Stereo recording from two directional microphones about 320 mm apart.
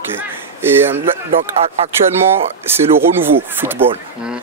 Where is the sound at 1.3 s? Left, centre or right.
Centre.